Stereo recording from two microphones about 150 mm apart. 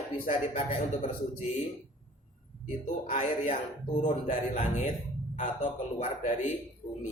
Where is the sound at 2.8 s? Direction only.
60° left (ahead or behind).